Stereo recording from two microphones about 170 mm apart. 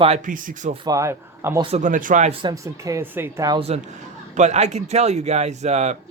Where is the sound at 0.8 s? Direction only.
20° right (ahead or behind).